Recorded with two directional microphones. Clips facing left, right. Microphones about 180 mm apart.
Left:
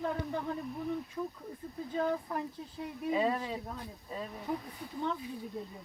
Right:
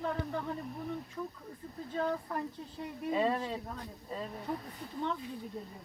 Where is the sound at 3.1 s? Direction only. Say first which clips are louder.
Even; 5° left (ahead or behind).